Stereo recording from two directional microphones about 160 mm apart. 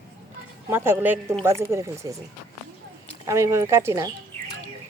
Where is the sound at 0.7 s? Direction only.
15° right (ahead or behind).